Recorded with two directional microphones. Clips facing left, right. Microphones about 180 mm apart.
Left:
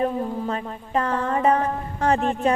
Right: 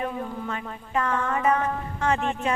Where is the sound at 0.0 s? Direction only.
35° left (ahead or behind).